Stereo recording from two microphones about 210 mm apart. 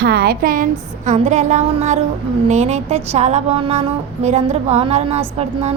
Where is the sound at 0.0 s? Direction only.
50° right (ahead or behind); by 5.2 s 30° right (ahead or behind).